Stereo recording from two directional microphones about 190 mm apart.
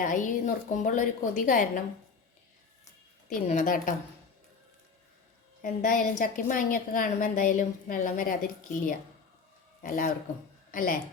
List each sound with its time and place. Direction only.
0.0 s a woman's voice: 45° left (ahead or behind)
3.2 s a woman's voice: 45° left (ahead or behind)
5.6 s a woman's voice: 45° left (ahead or behind)
9.8 s a woman's voice: 50° left (ahead or behind)